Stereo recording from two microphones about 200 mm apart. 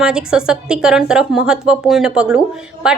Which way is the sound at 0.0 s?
5° right (ahead or behind).